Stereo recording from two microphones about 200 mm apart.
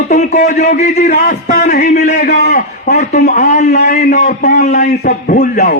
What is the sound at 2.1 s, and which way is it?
Speech, 55° left (ahead or behind).